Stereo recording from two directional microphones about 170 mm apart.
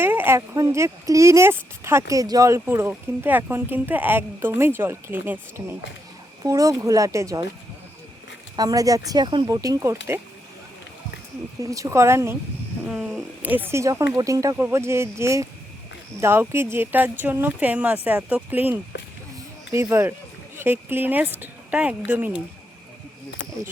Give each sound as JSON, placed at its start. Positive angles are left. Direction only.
{"t": 0.0, "sound": "speech", "side_deg": -10}
{"t": 8.5, "sound": "speech", "side_deg": -20}
{"t": 11.6, "sound": "speech", "side_deg": -20}
{"t": 12.8, "sound": "speech", "side_deg": -5}